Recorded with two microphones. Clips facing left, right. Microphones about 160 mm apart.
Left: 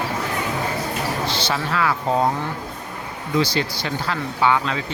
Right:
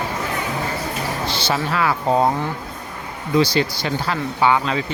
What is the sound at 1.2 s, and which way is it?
Speech, 10° right (ahead or behind).